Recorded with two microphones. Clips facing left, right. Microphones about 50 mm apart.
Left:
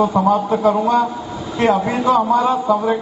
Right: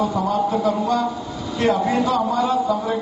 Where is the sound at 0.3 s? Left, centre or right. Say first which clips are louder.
Left 4 dB; left.